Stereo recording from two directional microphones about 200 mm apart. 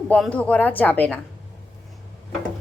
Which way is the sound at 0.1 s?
5° left (ahead or behind).